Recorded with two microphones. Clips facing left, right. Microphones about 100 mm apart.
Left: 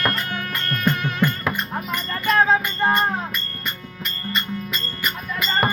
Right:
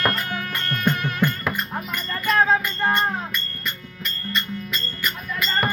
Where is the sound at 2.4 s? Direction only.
15° left (ahead or behind).